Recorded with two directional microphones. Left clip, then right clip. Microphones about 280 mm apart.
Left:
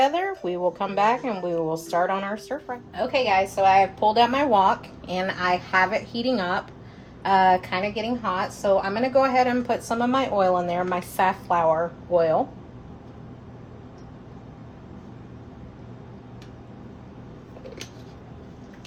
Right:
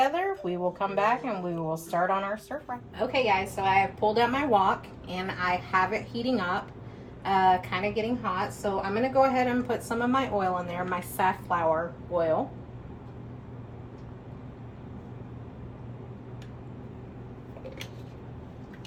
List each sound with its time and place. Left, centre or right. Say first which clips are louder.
0.0 s a woman's voice: left 4 dB; left